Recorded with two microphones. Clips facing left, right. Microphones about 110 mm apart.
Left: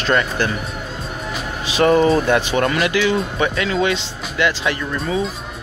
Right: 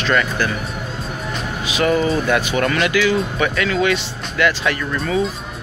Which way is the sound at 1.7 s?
35° left (ahead or behind).